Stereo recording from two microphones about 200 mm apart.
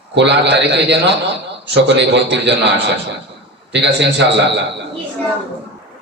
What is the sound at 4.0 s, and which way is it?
Speech, 60° right (ahead or behind).